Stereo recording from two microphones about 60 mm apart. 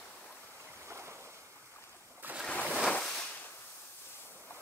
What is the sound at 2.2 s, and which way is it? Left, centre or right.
Ocean, right.